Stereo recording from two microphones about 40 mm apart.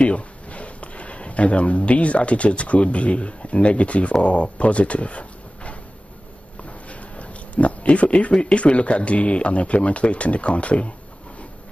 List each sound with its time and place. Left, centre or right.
0.0 s speech: left
6.9 s speech: left